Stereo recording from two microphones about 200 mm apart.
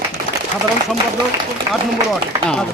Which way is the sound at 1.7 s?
Centre (ahead or behind).